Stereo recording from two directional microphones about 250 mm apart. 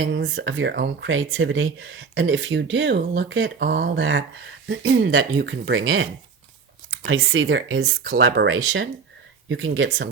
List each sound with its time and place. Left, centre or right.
0.0 s speech: right